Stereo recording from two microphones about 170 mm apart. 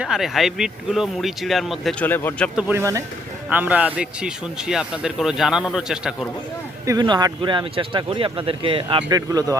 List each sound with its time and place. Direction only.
0.0 s speech: centre (ahead or behind)
2.6 s speech: 15° right (ahead or behind)
6.8 s speech: 25° right (ahead or behind)